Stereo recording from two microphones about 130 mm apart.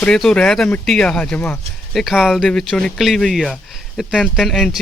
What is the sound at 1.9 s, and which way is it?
Speech, centre (ahead or behind).